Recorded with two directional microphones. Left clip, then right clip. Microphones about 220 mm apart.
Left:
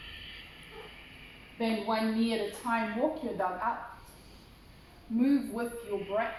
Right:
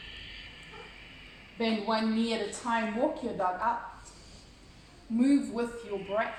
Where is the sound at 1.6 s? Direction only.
45° right (ahead or behind).